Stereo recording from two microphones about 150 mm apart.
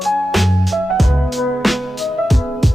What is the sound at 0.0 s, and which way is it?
Music, centre (ahead or behind).